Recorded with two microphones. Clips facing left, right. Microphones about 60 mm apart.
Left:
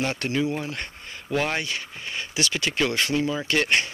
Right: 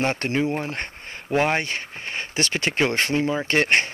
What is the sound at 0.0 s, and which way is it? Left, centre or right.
Speech, right.